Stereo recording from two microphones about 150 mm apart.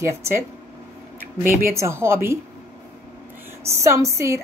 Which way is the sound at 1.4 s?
15° right (ahead or behind).